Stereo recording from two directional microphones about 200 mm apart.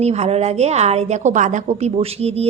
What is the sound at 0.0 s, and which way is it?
A woman's voice, 30° right (ahead or behind).